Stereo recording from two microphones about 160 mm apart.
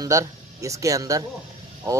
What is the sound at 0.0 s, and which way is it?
Speech, 20° right (ahead or behind).